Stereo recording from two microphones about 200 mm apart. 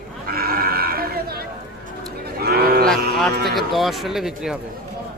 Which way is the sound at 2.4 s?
50° right (ahead or behind).